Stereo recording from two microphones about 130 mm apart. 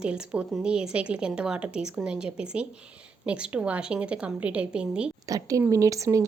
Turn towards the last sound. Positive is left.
turn(degrees=-25)  # may be behind; listen again after turning